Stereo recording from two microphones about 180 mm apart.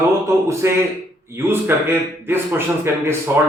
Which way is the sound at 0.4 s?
15° right (ahead or behind).